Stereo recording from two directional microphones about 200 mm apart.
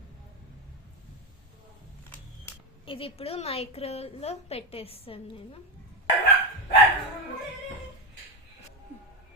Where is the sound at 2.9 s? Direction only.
25° left (ahead or behind).